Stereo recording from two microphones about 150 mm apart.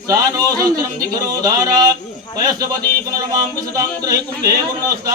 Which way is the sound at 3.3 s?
25° right (ahead or behind).